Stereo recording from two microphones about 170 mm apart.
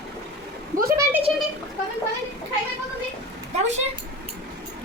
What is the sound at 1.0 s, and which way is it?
Speech, 10° right (ahead or behind).